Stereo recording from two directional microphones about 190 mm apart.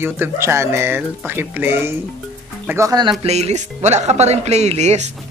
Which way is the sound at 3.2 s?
35° right (ahead or behind).